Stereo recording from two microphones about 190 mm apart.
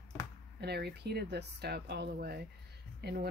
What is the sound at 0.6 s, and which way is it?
Speech, 60° right (ahead or behind).